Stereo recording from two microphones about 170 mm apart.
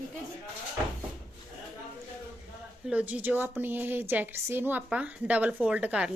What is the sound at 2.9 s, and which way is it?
A woman's voice, 10° right (ahead or behind).